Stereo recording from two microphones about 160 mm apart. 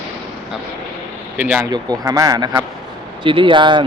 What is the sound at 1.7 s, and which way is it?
Speech, 25° right (ahead or behind).